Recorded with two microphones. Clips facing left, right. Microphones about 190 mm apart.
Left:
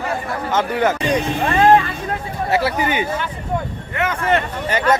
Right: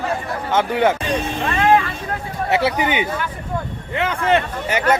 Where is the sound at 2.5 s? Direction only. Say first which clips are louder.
Even; 20° right (ahead or behind).